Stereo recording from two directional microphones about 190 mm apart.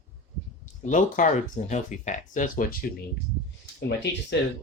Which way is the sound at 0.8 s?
40° left (ahead or behind).